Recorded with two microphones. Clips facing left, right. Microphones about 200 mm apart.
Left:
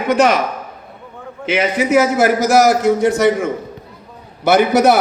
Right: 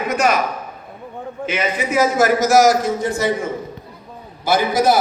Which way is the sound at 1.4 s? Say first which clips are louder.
Left 5 dB; 75° left (ahead or behind).